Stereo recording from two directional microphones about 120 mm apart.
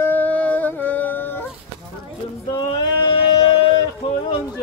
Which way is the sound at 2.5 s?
35° left (ahead or behind).